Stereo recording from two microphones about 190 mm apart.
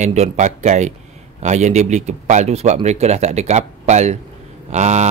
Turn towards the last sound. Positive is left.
turn(degrees=-35)  # may be behind; listen again after turning